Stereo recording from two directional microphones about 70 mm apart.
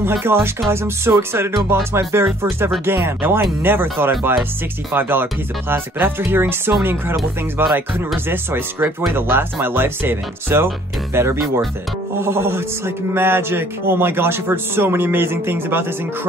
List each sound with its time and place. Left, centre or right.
0.0 s a man's voice: right
8.3 s a man's voice: right